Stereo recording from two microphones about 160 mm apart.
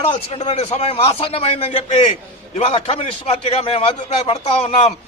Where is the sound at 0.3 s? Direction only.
40° left (ahead or behind).